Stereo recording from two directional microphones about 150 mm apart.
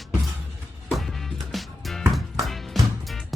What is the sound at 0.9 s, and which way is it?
Music, centre (ahead or behind).